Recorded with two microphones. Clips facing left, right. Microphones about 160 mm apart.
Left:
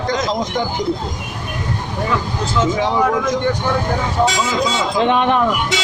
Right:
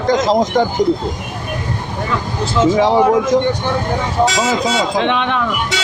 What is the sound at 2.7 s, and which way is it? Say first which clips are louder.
Speech: right 7 dB; 30° right (ahead or behind).